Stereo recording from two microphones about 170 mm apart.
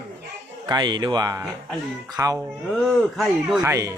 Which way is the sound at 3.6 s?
20° right (ahead or behind).